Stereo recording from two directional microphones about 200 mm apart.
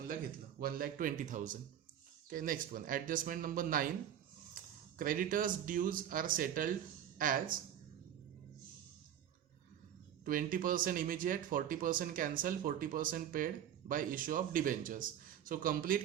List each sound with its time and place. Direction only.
0.6 s speech: 45° right (ahead or behind)
10.2 s speech: 45° right (ahead or behind)